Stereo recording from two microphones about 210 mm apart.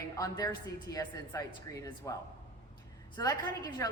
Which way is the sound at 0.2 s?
15° left (ahead or behind).